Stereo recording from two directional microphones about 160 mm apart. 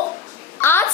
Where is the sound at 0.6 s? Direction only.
15° left (ahead or behind).